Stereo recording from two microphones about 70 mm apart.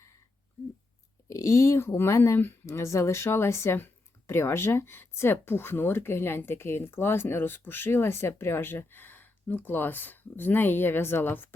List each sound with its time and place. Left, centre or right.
1.3 s speech: left